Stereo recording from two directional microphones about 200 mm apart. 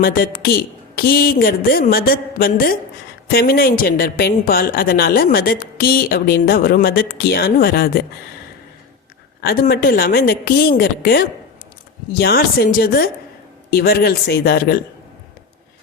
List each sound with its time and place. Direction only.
0.0 s a woman's voice: 45° left (ahead or behind)
9.4 s a woman's voice: 50° left (ahead or behind)